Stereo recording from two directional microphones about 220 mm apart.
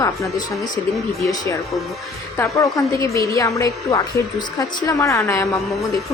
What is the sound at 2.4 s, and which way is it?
A woman's voice, 15° left (ahead or behind).